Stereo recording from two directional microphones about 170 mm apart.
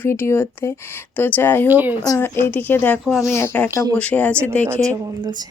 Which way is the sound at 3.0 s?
Centre (ahead or behind).